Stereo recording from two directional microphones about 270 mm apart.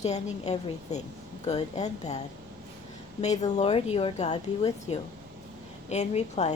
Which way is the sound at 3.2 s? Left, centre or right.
Left.